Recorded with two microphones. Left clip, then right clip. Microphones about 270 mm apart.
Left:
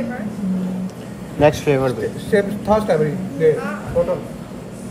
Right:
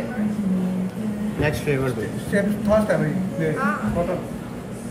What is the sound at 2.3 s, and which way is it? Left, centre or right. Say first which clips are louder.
Speech: left 3 dB; left.